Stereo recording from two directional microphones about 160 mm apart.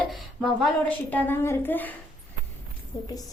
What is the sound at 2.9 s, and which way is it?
Speech, 25° left (ahead or behind).